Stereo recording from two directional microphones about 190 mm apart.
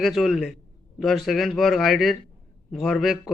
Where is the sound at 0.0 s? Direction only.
Centre (ahead or behind).